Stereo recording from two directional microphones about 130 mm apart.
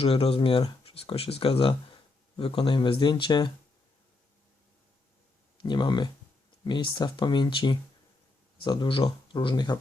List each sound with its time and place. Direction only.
0.0 s speech: 45° left (ahead or behind)
5.5 s speech: 35° left (ahead or behind)